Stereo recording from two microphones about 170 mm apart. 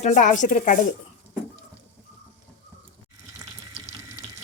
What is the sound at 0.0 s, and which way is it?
Speech, 50° left (ahead or behind).